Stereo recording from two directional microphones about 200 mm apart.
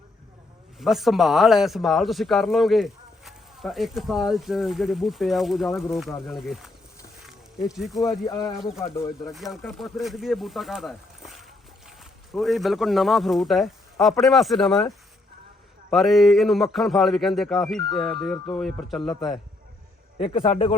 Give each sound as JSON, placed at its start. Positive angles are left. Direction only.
{"t": 0.8, "sound": "speech", "side_deg": 0}
{"t": 7.9, "sound": "speech", "side_deg": 15}
{"t": 9.3, "sound": "speech", "side_deg": 0}
{"t": 15.9, "sound": "speech", "side_deg": 0}
{"t": 18.9, "sound": "speech", "side_deg": 20}